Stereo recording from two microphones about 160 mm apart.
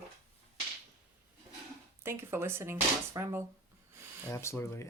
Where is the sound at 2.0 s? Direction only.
15° right (ahead or behind).